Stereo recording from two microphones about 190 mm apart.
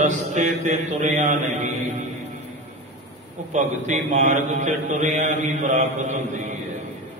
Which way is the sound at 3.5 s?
40° right (ahead or behind).